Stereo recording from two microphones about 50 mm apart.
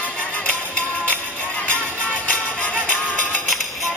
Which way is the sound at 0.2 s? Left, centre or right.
Left.